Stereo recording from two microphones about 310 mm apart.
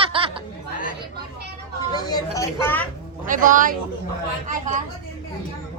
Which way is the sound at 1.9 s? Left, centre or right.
Centre.